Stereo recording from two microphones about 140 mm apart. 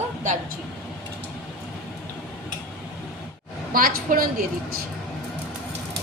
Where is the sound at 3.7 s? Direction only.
85° right.